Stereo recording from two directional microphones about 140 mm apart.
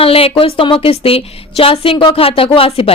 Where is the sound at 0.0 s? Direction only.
45° left (ahead or behind).